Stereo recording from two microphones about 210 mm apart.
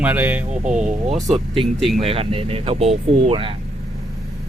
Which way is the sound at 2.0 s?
25° right (ahead or behind).